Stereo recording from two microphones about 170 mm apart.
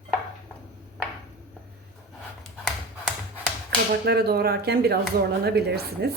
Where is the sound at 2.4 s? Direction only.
Centre (ahead or behind).